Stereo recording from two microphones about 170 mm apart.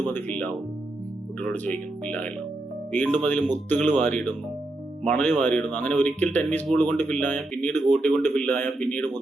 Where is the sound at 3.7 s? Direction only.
45° right (ahead or behind).